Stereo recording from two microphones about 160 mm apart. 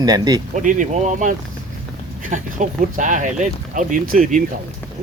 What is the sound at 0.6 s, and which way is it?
Speech, 55° right (ahead or behind).